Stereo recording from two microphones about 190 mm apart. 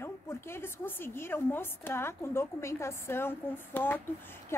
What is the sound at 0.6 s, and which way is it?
A woman's voice, 10° left (ahead or behind).